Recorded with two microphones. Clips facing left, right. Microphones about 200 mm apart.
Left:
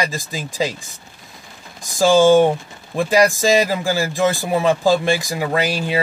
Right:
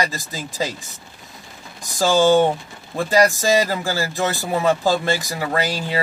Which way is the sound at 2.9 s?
15° left (ahead or behind).